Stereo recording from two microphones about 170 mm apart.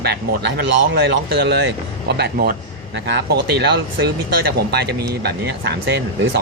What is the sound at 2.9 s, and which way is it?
Speech, 85° right.